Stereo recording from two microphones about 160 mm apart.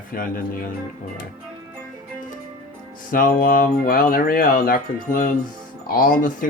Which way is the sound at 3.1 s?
60° left (ahead or behind).